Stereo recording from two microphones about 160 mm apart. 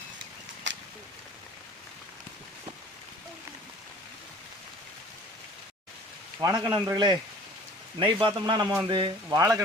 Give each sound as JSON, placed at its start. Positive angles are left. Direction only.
{"t": 0.7, "sound": "a sound", "side_deg": -90}
{"t": 6.4, "sound": "a man's voice", "side_deg": -25}
{"t": 9.3, "sound": "a man's voice", "side_deg": -20}